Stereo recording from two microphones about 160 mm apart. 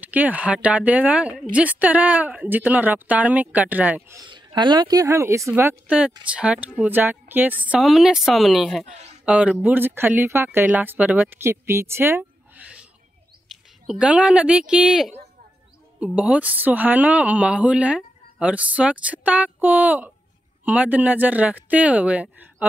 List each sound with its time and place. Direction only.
0.0 s speech: 10° right (ahead or behind)
4.2 s a woman's voice: 30° right (ahead or behind); by 22.7 s 10° right (ahead or behind)